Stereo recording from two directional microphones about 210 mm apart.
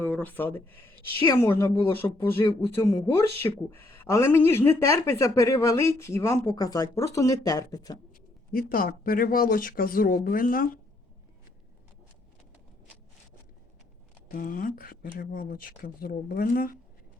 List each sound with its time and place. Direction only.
0.0 s speech: 10° left (ahead or behind)
8.1 s speech: 45° left (ahead or behind)
14.3 s speech: 45° left (ahead or behind)